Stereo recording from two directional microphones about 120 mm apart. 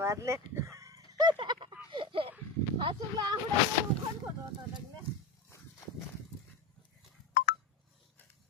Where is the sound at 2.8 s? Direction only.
40° right (ahead or behind).